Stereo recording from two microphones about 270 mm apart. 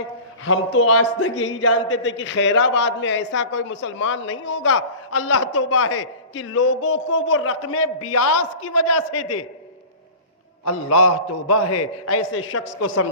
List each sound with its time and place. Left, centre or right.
0.4 s a man's voice: left
1.5 s a man's voice: left
5.5 s a man's voice: left
10.7 s a man's voice: left